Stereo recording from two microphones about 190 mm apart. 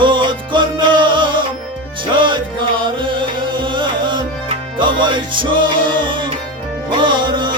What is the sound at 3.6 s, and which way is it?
Music, 25° right (ahead or behind).